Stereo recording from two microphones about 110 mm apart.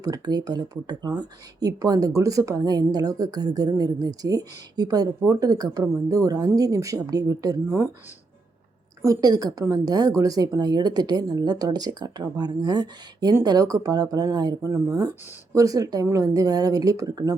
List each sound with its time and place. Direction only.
0.0 s speech: 35° right (ahead or behind)
9.0 s speech: 30° right (ahead or behind)